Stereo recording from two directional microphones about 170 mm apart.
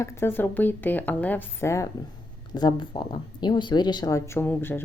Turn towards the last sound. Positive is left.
turn(degrees=15)  # may be behind; listen again after turning